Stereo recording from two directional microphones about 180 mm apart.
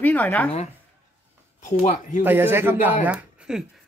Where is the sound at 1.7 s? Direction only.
40° left (ahead or behind).